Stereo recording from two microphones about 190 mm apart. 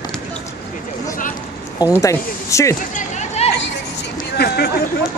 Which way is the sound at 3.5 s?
65° left (ahead or behind).